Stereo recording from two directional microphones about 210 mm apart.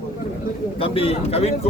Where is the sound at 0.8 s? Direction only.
25° left (ahead or behind).